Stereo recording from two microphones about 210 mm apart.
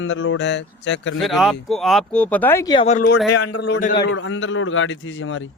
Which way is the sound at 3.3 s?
90° left.